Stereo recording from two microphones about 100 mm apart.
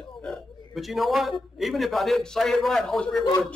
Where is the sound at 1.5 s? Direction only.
Centre (ahead or behind).